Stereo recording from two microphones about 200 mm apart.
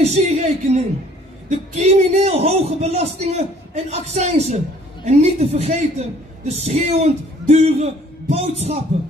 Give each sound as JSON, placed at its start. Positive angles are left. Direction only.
{"t": 0.0, "sound": "a woman's voice", "side_deg": -30}